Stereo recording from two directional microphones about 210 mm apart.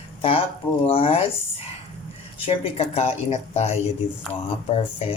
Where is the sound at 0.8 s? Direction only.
30° left (ahead or behind).